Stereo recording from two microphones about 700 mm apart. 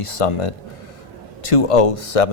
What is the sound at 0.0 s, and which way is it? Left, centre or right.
A man's voice, left.